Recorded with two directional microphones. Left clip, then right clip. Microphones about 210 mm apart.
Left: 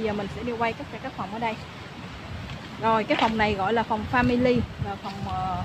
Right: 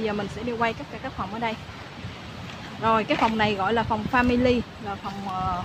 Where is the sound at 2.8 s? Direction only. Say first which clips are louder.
Right 1 dB; 5° right (ahead or behind).